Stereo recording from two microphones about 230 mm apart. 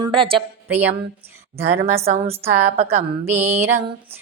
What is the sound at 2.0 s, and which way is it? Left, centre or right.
Mantra, right.